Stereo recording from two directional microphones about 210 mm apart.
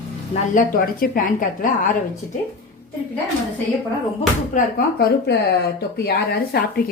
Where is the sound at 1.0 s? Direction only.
40° left (ahead or behind).